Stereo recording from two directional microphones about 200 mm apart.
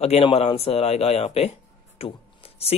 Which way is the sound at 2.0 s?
30° left (ahead or behind).